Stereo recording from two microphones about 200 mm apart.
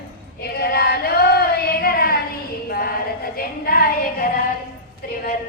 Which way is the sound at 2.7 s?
50° left (ahead or behind).